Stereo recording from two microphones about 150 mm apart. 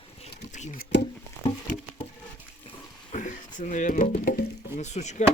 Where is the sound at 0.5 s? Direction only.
60° left (ahead or behind).